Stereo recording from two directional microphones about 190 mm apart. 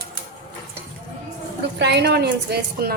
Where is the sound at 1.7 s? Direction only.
65° right (ahead or behind).